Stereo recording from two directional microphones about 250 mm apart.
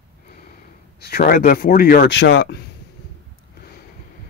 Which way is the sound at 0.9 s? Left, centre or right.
Left.